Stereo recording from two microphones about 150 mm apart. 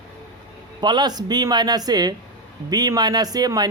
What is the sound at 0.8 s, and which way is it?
Speech, 30° right (ahead or behind).